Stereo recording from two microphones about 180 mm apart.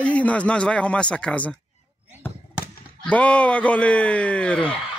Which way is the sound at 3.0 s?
5° left (ahead or behind).